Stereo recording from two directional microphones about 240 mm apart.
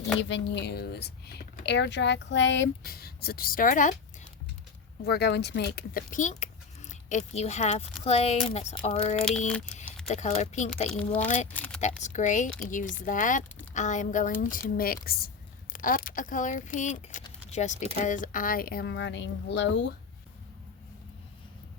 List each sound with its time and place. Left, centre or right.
0.2 s speech: left
5.0 s speech: left
9.1 s speech: centre
10.1 s speech: left
10.9 s speech: centre
11.5 s a sound: centre
11.8 s speech: left
17.2 s keys jangling: left
18.0 s speech: left